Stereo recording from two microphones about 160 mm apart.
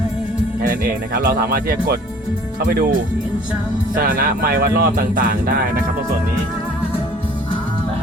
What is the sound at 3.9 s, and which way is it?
Speech, 60° right (ahead or behind).